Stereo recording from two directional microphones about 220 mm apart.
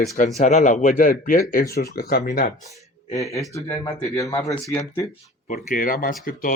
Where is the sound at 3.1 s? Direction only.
15° left (ahead or behind).